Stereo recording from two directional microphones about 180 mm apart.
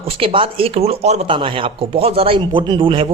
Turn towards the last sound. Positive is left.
turn(degrees=-30)  # may be behind; listen again after turning